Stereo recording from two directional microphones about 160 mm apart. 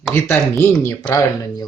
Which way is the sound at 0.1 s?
15° left (ahead or behind).